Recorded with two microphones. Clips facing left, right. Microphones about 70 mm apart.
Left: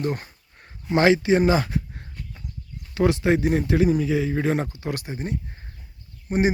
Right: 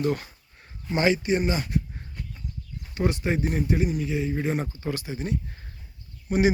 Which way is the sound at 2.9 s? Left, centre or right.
Left.